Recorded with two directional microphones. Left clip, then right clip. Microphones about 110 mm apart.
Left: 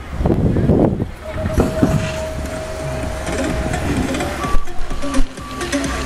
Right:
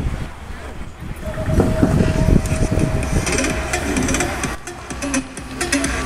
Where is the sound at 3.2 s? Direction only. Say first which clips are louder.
Right 1 dB; 35° right (ahead or behind).